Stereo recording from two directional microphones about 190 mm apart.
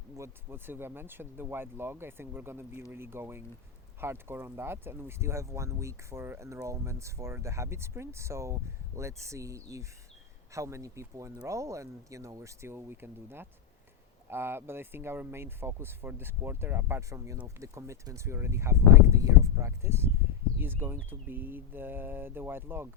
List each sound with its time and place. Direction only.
0.2 s speech: 10° right (ahead or behind)